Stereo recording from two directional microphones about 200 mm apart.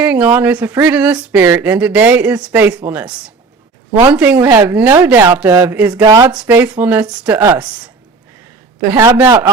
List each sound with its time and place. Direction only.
0.0 s speech: 5° right (ahead or behind)
8.8 s speech: 15° right (ahead or behind)